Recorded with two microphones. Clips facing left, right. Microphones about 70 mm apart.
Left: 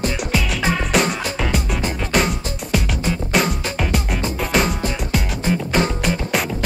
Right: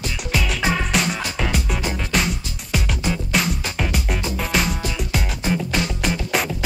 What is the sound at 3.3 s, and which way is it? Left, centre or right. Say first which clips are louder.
Music: left 5 dB; centre.